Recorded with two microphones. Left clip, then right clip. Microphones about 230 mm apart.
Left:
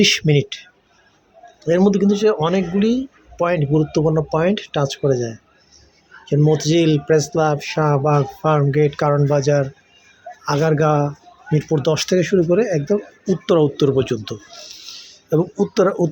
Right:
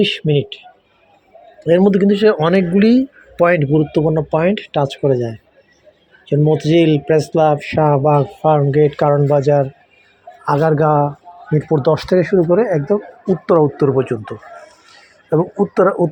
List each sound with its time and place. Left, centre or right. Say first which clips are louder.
0.0 s speech: even; centre
1.6 s speech: right 4 dB; centre
10.4 s speech: right 3 dB; centre
13.8 s speech: right 2 dB; centre
16.0 s a woman's voice: right 3 dB; centre